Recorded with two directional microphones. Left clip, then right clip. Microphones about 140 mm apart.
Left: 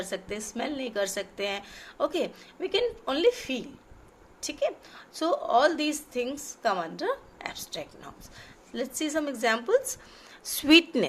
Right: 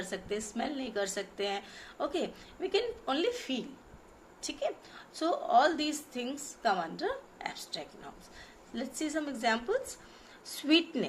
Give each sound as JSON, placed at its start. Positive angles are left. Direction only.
{"t": 0.0, "sound": "a woman's voice", "side_deg": 50}